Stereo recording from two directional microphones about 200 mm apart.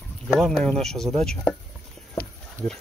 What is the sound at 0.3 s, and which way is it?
Speech, centre (ahead or behind).